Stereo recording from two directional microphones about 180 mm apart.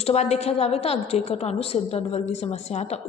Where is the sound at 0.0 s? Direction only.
35° left (ahead or behind).